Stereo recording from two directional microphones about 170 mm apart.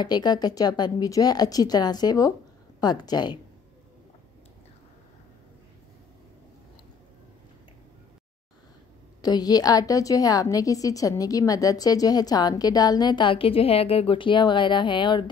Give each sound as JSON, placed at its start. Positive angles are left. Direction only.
{"t": 0.0, "sound": "a woman's voice", "side_deg": 25}
{"t": 9.2, "sound": "a woman's voice", "side_deg": 25}